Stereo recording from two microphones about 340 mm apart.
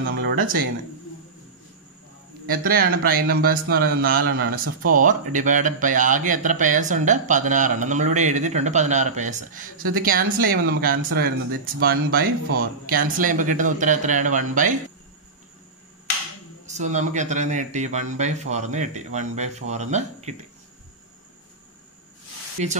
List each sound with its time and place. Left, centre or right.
0.0 s a sound: right
2.4 s speech: right
16.7 s speech: right